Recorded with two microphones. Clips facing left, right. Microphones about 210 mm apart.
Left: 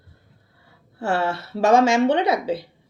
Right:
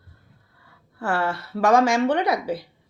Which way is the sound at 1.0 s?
25° left (ahead or behind).